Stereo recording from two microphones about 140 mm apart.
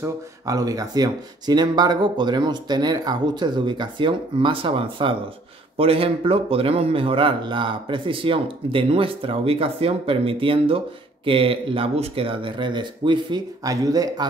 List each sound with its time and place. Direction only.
0.0 s speech: 25° right (ahead or behind)